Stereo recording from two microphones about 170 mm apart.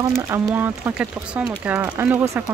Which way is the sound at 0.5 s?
10° right (ahead or behind).